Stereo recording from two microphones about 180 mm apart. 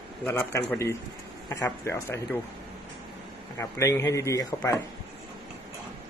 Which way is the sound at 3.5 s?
15° left (ahead or behind).